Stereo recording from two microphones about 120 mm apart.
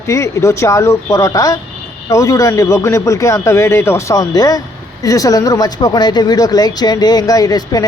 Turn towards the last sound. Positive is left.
turn(degrees=30)  # may be behind; listen again after turning